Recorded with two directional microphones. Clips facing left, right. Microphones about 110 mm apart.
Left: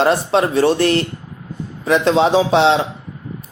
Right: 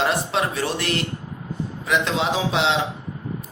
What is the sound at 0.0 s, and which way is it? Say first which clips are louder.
Speech: left 7 dB; 35° left (ahead or behind).